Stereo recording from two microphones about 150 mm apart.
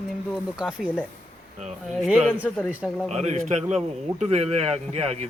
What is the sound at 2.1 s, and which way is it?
Speech, 10° right (ahead or behind).